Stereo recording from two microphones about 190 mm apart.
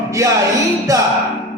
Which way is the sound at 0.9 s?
20° right (ahead or behind).